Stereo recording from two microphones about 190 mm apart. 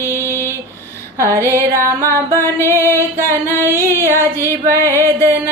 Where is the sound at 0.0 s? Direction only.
15° left (ahead or behind).